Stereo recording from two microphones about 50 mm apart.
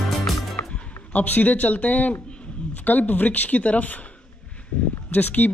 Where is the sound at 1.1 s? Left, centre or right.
Left.